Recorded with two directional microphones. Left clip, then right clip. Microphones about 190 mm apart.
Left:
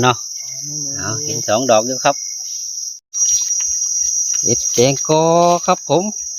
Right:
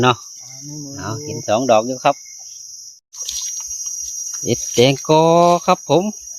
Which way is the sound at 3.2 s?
Centre (ahead or behind).